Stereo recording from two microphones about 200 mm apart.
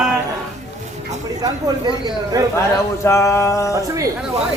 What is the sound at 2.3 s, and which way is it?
Speech, 15° right (ahead or behind).